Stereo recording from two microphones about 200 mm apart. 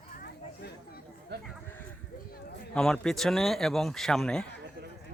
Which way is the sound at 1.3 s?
55° right (ahead or behind).